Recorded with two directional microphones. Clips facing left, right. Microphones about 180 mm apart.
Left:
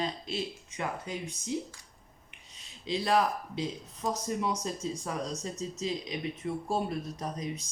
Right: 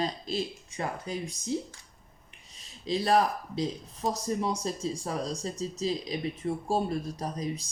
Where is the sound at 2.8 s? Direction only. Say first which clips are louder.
Right 2 dB; 40° right (ahead or behind).